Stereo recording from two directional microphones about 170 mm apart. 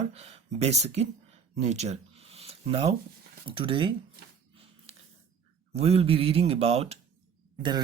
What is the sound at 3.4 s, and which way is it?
Speech, 30° right (ahead or behind).